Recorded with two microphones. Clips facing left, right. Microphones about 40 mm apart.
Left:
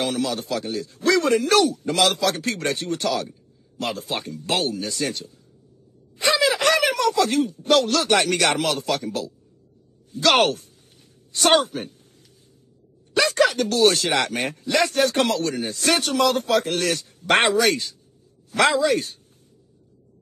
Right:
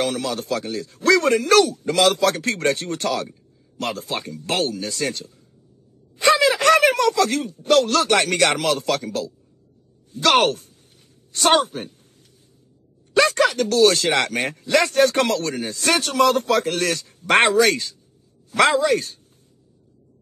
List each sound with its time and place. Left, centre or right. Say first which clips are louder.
0.0 s a man's voice: right 1 dB; right
6.2 s a sound: right 4 dB; right
7.8 s a man's voice: right 1 dB; right
10.1 s a man's voice: right 1 dB; right
13.8 s a man's voice: left 1 dB; right